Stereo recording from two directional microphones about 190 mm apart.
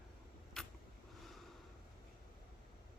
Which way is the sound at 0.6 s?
5° left (ahead or behind).